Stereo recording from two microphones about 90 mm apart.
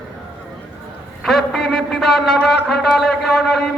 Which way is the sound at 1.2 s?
Centre (ahead or behind).